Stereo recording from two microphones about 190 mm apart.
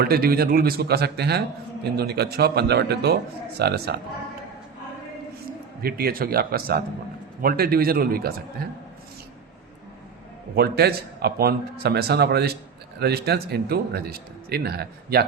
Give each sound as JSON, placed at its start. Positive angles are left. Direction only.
{"t": 0.0, "sound": "a man's voice", "side_deg": -55}
{"t": 5.8, "sound": "speech", "side_deg": -50}
{"t": 10.5, "sound": "a man's voice", "side_deg": -55}